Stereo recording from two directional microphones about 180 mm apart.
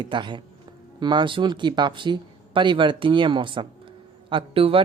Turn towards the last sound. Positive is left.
turn(degrees=-30)  # may be behind; listen again after turning